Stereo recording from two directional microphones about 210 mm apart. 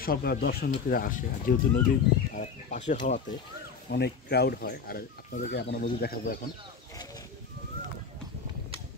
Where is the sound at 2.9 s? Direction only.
35° left (ahead or behind).